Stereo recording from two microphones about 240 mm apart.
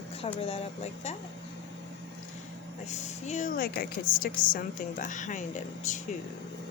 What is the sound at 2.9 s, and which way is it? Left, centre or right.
A woman's voice, left.